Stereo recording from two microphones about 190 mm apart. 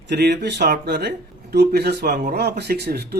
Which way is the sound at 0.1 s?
60° right (ahead or behind).